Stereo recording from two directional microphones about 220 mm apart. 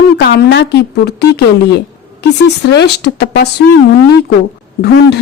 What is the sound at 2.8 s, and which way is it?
Speech, 50° left (ahead or behind).